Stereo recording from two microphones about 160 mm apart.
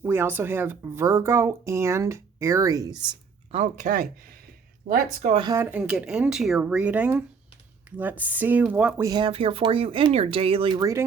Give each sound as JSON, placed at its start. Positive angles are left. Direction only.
{"t": 0.0, "sound": "a woman's voice", "side_deg": -15}
{"t": 3.5, "sound": "speech", "side_deg": -50}
{"t": 5.3, "sound": "speech", "side_deg": -30}
{"t": 5.5, "sound": "a woman's voice", "side_deg": -10}
{"t": 7.9, "sound": "a sound", "side_deg": -10}
{"t": 8.2, "sound": "a woman's voice", "side_deg": -10}
{"t": 9.0, "sound": "speech", "side_deg": -25}
{"t": 10.8, "sound": "speech", "side_deg": -20}